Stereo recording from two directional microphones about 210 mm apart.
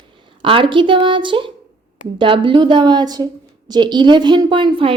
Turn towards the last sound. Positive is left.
turn(degrees=-25)  # may be behind; listen again after turning